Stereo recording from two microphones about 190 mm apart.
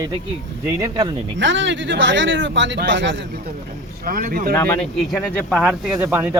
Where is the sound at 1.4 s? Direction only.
75° right (ahead or behind).